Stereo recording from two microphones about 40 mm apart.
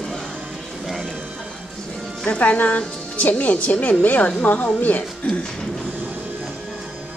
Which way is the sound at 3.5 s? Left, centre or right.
Left.